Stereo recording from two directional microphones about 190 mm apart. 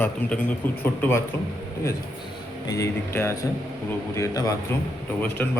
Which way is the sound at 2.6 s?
15° left (ahead or behind).